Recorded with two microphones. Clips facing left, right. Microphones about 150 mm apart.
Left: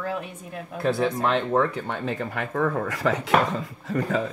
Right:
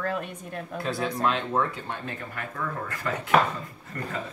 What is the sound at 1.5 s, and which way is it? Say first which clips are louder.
Speech: left 5 dB; 80° left.